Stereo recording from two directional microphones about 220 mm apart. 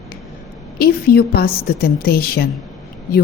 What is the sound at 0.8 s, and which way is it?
A woman's voice, 45° left (ahead or behind).